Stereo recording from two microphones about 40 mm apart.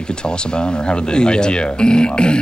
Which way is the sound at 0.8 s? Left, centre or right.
Left.